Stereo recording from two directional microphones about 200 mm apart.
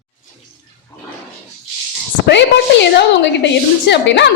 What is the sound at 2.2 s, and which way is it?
A woman's voice, 60° left (ahead or behind).